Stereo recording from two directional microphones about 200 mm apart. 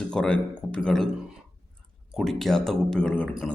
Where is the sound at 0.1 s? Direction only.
5° left (ahead or behind).